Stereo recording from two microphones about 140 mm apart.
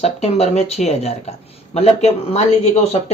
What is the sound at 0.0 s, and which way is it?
Speech, 50° left (ahead or behind).